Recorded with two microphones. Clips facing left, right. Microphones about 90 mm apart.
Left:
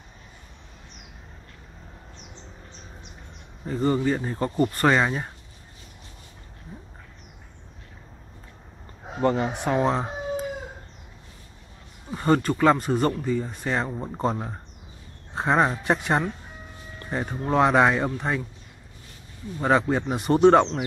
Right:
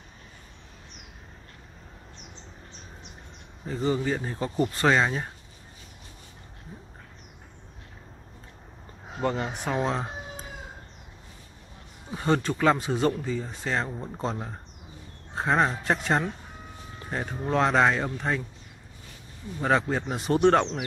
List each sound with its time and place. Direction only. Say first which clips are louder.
3.6 s speech: left 4 dB; centre (ahead or behind)
9.2 s speech: left 5 dB; 5° left (ahead or behind)
12.1 s speech: left 4 dB; centre (ahead or behind)
14.2 s speech: left 5 dB; 20° left (ahead or behind)
15.3 s speech: left 2 dB; 10° left (ahead or behind)
19.6 s speech: left 3 dB; 5° left (ahead or behind)